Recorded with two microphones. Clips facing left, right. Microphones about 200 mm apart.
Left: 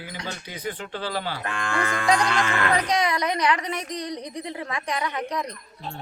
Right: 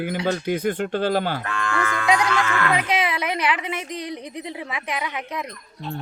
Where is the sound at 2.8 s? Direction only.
5° right (ahead or behind).